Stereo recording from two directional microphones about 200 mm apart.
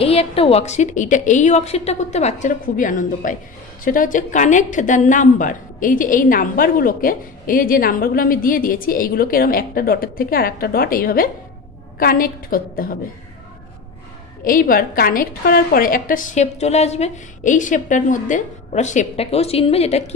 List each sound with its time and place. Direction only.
0.0 s a woman's voice: 30° left (ahead or behind); by 12.9 s 45° left (ahead or behind)
14.4 s a woman's voice: 45° left (ahead or behind)